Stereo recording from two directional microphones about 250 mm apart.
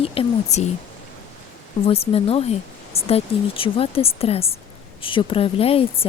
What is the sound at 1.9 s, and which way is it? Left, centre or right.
Speech, left.